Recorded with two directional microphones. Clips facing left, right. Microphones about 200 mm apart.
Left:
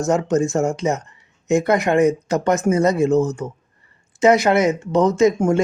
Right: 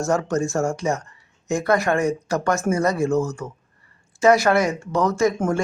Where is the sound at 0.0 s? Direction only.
20° left (ahead or behind).